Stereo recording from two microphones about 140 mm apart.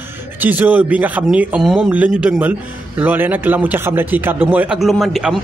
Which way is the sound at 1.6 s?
Centre (ahead or behind).